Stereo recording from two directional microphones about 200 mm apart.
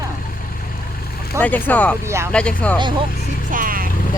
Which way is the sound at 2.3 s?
5° left (ahead or behind).